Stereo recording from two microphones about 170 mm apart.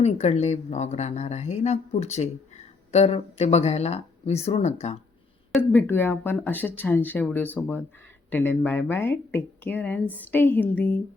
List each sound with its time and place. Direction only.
0.0 s a woman's voice: 40° left (ahead or behind)
5.5 s speech: 10° left (ahead or behind)